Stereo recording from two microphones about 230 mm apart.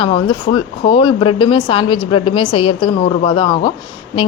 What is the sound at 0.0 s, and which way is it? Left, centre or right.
A woman's voice, left.